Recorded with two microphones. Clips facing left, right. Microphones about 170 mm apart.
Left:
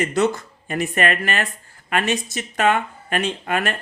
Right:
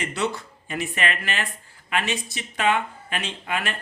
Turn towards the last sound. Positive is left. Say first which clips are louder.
# left 6 dB
turn(degrees=50)  # may be behind; listen again after turning